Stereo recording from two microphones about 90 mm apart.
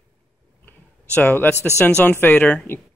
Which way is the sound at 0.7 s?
20° left (ahead or behind).